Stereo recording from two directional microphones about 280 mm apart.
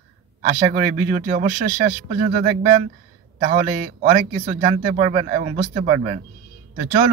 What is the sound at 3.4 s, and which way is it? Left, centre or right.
Speech, right.